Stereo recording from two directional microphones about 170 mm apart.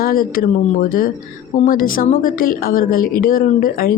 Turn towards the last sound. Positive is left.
turn(degrees=55)  # may be behind; listen again after turning